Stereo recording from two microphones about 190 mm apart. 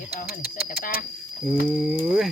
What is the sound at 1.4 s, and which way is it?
Speech, 5° right (ahead or behind).